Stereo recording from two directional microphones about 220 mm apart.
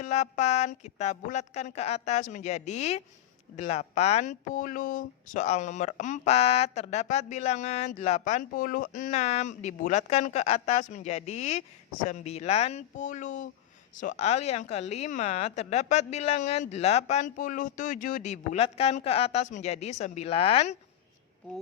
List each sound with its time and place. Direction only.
0.0 s speech: 30° left (ahead or behind)